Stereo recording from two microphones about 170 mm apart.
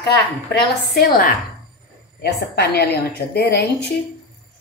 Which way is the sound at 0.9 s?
70° left (ahead or behind).